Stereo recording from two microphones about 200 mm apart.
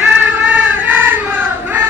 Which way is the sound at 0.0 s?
10° right (ahead or behind).